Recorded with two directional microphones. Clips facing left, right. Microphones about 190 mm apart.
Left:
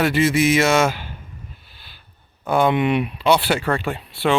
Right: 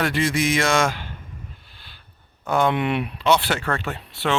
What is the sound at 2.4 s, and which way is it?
Speech, 10° left (ahead or behind).